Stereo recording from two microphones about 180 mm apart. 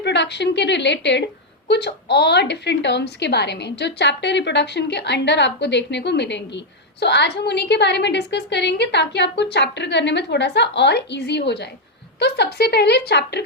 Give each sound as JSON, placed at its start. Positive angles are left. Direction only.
{"t": 0.0, "sound": "a woman's voice", "side_deg": 70}